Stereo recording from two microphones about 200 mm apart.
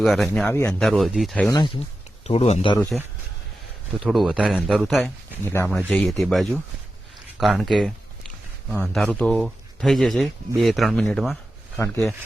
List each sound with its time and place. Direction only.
0.0 s speech: centre (ahead or behind)
1.5 s speech: 20° left (ahead or behind)
2.9 s speech: centre (ahead or behind)
5.5 s speech: 10° left (ahead or behind)
5.7 s speech: centre (ahead or behind)
8.7 s speech: 5° left (ahead or behind)